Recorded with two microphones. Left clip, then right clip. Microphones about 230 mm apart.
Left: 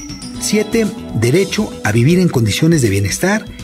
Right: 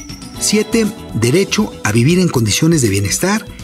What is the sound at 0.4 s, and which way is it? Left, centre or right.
Speech, right.